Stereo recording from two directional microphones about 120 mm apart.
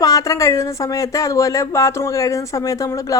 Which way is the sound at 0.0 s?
30° left (ahead or behind).